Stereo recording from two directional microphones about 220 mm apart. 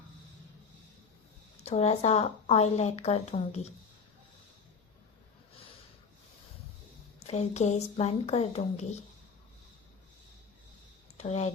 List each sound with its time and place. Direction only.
1.6 s a woman's voice: 30° left (ahead or behind)
7.2 s a woman's voice: 30° left (ahead or behind)
11.2 s a woman's voice: 30° left (ahead or behind)